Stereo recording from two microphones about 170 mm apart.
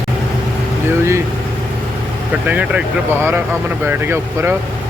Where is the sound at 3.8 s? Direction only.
15° right (ahead or behind).